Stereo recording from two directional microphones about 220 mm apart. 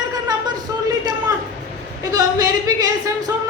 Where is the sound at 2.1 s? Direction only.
15° right (ahead or behind).